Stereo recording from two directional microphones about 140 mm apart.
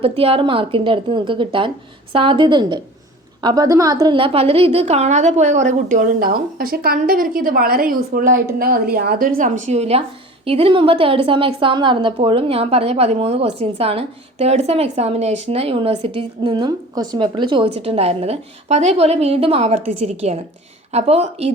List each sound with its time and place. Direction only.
0.0 s a woman's voice: 45° right (ahead or behind)